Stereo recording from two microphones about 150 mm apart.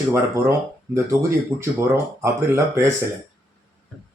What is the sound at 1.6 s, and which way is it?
Speech, 15° right (ahead or behind).